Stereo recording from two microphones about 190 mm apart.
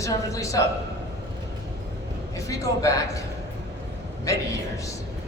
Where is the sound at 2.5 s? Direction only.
15° left (ahead or behind).